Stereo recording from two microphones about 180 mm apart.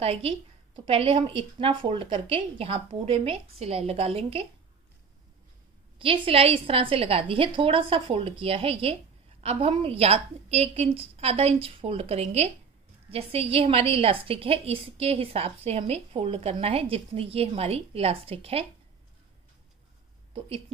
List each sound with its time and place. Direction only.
0.0 s a woman's voice: 35° right (ahead or behind)
5.9 s a woman's voice: 30° right (ahead or behind)
20.3 s a woman's voice: 30° right (ahead or behind)